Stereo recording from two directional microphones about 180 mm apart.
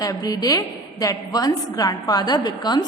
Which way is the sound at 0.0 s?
20° left (ahead or behind).